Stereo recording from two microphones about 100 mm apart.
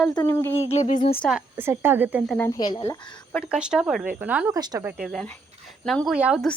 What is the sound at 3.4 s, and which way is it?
Speech, 10° right (ahead or behind).